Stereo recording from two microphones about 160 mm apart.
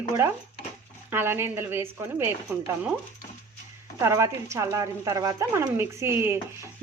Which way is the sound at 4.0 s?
15° right (ahead or behind).